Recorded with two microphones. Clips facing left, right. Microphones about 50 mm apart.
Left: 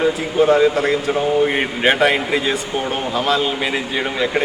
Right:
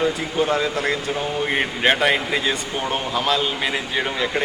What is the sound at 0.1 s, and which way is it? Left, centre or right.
Speech, centre.